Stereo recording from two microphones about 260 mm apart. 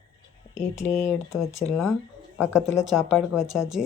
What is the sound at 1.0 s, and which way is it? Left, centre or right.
Speech, centre.